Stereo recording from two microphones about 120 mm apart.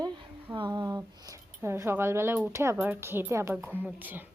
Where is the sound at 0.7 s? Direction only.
30° right (ahead or behind); by 4.3 s 15° right (ahead or behind).